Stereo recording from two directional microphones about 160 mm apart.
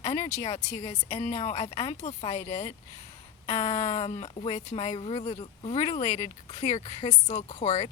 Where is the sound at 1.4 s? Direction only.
40° left (ahead or behind).